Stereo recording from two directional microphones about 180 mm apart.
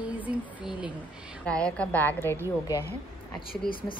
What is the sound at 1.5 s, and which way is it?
Speech, 5° left (ahead or behind).